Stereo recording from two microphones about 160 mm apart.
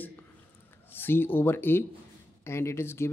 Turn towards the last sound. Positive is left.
turn(degrees=15)  # may be behind; listen again after turning